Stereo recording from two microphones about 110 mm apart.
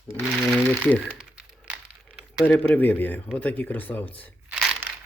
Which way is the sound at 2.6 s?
15° left (ahead or behind).